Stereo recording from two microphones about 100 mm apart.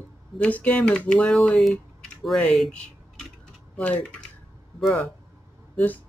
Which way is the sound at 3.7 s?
10° left (ahead or behind).